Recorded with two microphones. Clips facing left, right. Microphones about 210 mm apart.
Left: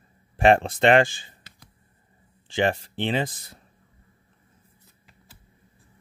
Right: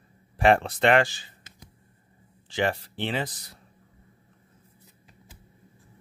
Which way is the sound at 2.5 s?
25° left (ahead or behind).